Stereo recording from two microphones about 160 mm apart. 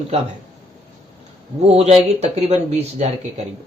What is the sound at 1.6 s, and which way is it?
Speech, 40° right (ahead or behind).